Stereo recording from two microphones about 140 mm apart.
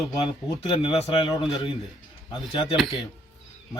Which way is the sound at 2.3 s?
35° left (ahead or behind).